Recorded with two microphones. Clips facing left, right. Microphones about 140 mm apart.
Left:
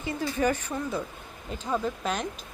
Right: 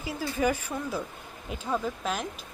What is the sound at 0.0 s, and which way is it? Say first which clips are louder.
A woman's voice: left 1 dB; 5° right (ahead or behind).